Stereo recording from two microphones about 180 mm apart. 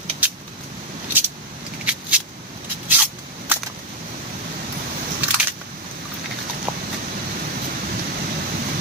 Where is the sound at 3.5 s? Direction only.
10° right (ahead or behind).